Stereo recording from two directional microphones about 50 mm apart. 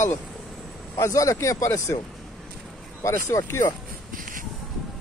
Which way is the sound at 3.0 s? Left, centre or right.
Left.